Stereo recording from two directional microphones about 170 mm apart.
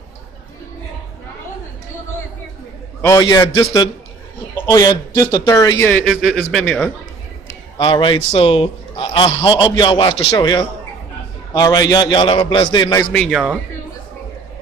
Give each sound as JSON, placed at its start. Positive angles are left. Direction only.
{"t": 3.0, "sound": "a man's voice", "side_deg": 20}
{"t": 4.6, "sound": "a man's voice", "side_deg": 20}
{"t": 5.9, "sound": "a man's voice", "side_deg": 5}
{"t": 7.7, "sound": "a man's voice", "side_deg": 30}
{"t": 13.1, "sound": "a man's voice", "side_deg": 0}